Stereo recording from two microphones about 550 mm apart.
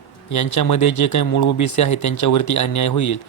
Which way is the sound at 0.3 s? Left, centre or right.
Left.